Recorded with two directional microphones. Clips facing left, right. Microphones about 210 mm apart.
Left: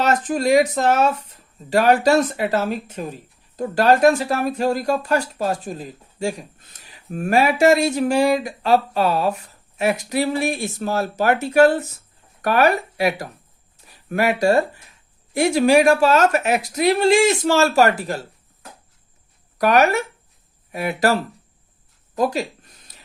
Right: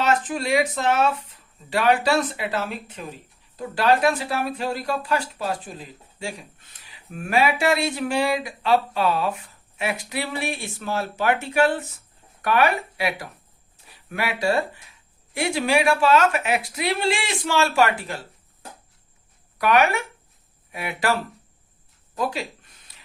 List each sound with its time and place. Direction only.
0.0 s speech: 40° left (ahead or behind)
19.5 s speech: 40° left (ahead or behind)
22.2 s speech: 45° left (ahead or behind)